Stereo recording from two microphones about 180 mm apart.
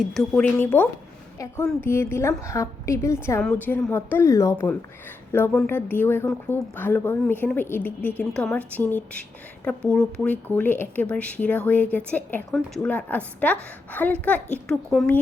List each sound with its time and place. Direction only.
0.0 s a woman's voice: centre (ahead or behind)